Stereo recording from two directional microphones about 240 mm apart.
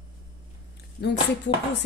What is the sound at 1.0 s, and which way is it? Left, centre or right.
Speech, left.